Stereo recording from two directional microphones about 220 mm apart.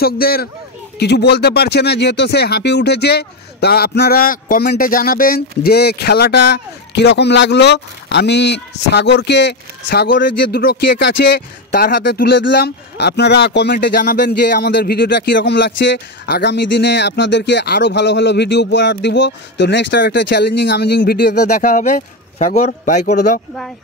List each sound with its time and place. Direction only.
0.0 s speech: 45° left (ahead or behind)
21.5 s a man's voice: 35° left (ahead or behind)